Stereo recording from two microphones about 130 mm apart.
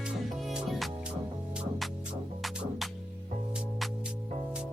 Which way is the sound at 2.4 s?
Centre (ahead or behind).